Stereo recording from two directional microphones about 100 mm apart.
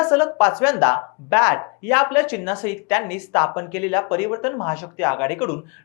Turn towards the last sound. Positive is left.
turn(degrees=15)  # may be behind; listen again after turning